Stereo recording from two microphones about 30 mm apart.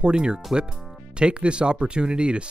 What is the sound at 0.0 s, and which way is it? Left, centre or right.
Speech, right.